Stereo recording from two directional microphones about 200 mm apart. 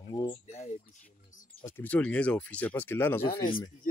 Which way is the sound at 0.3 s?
35° left (ahead or behind).